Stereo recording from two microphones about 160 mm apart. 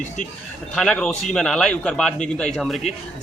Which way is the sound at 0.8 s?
5° left (ahead or behind).